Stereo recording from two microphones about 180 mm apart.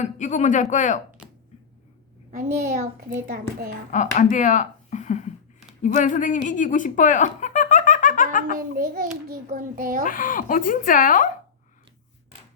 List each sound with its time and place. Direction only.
0.0 s speech: 45° left (ahead or behind)
2.3 s a child's voice: 50° right (ahead or behind)
3.9 s speech: 45° left (ahead or behind)
8.5 s a child's voice: 50° right (ahead or behind)
10.1 s speech: 50° left (ahead or behind)